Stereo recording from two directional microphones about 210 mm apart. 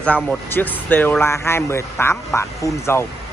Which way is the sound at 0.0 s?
5° left (ahead or behind).